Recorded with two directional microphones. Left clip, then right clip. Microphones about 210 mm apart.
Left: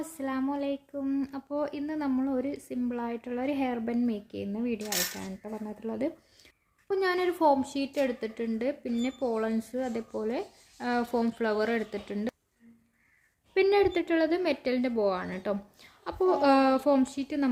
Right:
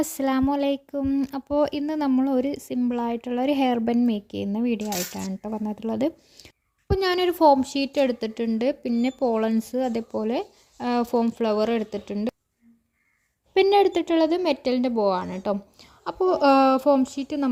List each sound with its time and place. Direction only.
0.0 s speech: 50° right (ahead or behind); by 12.3 s 30° right (ahead or behind)
13.5 s speech: 35° right (ahead or behind)
15.8 s a woman's voice: 25° right (ahead or behind)